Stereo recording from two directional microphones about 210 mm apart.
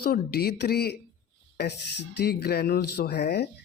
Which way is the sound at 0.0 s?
45° left (ahead or behind).